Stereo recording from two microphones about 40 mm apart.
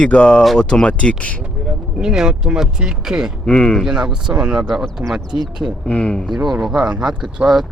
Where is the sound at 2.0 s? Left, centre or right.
Centre.